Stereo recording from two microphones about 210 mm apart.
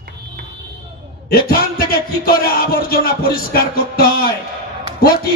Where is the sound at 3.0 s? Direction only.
45° left (ahead or behind).